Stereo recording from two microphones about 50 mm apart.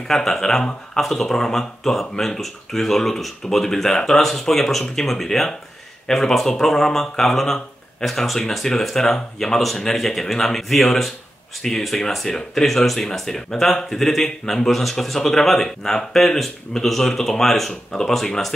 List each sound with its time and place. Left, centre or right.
0.1 s speech: centre